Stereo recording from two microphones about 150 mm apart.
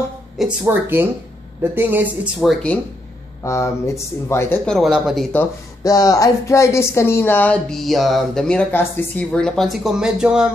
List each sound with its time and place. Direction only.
0.7 s speech: 15° right (ahead or behind)
2.4 s speech: 10° left (ahead or behind)
3.4 s speech: 20° left (ahead or behind)
4.6 s speech: centre (ahead or behind)
5.9 s speech: 25° left (ahead or behind); by 10.5 s 5° right (ahead or behind)